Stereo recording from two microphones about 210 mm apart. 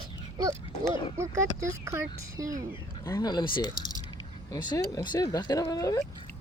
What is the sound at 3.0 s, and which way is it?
Speech, 15° left (ahead or behind).